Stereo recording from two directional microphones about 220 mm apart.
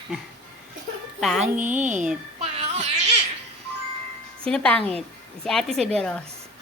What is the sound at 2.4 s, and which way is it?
Child singing, 30° right (ahead or behind).